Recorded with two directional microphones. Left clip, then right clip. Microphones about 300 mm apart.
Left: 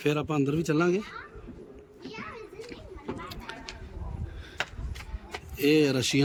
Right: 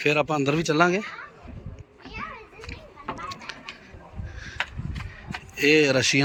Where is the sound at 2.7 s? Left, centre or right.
Centre.